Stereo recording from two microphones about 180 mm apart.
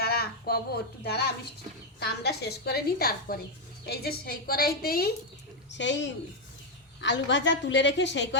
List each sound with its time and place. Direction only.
0.0 s a sound: 60° left (ahead or behind)
2.0 s a woman's voice: 65° left (ahead or behind)
5.7 s a woman's voice: 85° left